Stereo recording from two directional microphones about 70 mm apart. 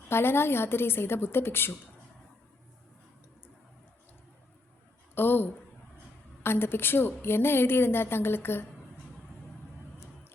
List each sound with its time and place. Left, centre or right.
0.1 s a woman's voice: left
5.1 s a sound: left
6.4 s a woman's voice: left